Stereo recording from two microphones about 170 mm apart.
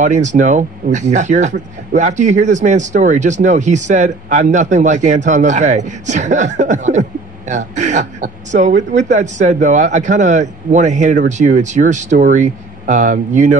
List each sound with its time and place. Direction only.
0.0 s speech: 45° right (ahead or behind)